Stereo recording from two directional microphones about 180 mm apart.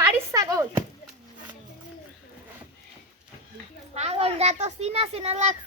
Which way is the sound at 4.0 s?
35° right (ahead or behind).